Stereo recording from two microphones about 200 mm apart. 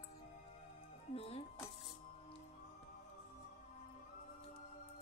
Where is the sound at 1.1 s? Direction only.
30° left (ahead or behind).